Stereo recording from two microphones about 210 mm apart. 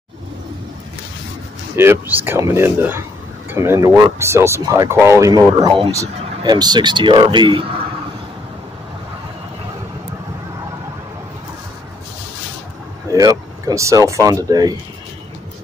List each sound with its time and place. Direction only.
1.8 s a man's voice: 10° right (ahead or behind)
13.1 s speech: 15° right (ahead or behind)